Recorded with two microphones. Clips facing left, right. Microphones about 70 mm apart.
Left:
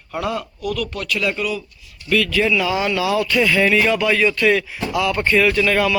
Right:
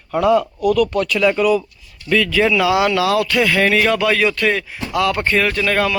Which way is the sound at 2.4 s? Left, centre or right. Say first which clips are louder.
Right 4 dB; right.